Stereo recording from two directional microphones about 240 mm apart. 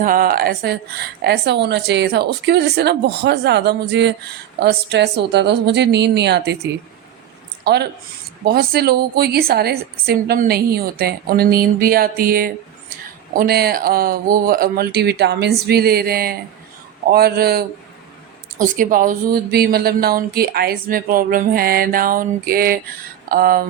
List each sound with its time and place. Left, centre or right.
0.0 s a woman's voice: right
7.6 s speech: right